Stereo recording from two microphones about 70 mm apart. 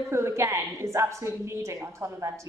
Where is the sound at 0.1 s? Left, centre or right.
Right.